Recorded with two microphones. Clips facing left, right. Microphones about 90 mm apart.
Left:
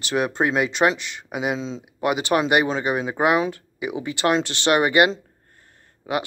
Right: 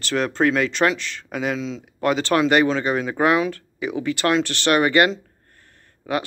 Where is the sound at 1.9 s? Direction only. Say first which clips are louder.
Right 1 dB; 15° left (ahead or behind).